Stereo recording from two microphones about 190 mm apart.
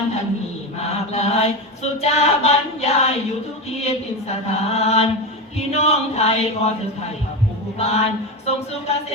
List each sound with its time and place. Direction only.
0.8 s chant: 35° left (ahead or behind)
7.8 s chant: 35° left (ahead or behind)